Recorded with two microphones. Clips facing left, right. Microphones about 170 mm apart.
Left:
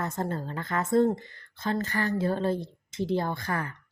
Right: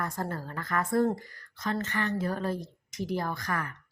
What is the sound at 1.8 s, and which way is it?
A woman's voice, 35° left (ahead or behind).